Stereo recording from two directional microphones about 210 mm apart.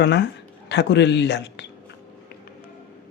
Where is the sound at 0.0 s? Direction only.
55° left (ahead or behind).